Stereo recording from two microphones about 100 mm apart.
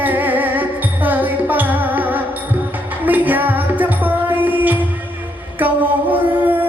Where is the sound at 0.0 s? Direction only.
20° right (ahead or behind).